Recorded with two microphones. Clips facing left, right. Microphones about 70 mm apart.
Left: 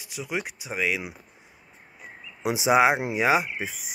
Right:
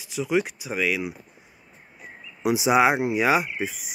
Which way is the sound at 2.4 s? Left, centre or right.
Left.